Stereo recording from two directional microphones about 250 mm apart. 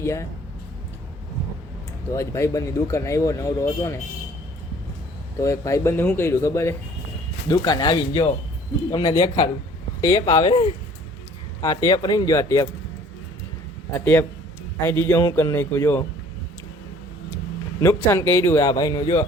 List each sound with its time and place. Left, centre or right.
0.0 s speech: centre
2.1 s speech: centre
5.4 s speech: centre
13.9 s speech: centre
17.3 s speech: centre